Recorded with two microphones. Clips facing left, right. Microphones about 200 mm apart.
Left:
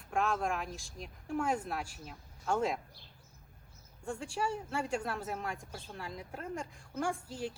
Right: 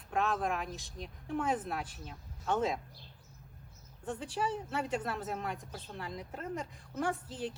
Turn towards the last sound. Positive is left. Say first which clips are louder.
# right 1 dB
turn(degrees=0)  # may be behind; listen again after turning